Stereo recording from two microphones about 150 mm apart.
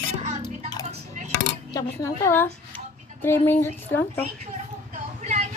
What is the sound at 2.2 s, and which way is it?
Speech, 15° left (ahead or behind).